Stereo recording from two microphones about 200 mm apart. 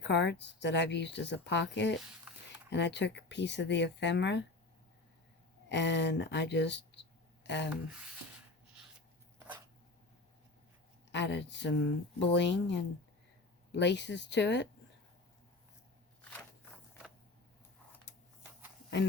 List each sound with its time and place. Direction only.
0.0 s speech: 60° left (ahead or behind)
2.3 s a sound: 5° right (ahead or behind)
2.6 s speech: 60° left (ahead or behind)
5.6 s speech: 60° left (ahead or behind)
7.4 s a sound: 60° left (ahead or behind)
11.1 s speech: 60° left (ahead or behind)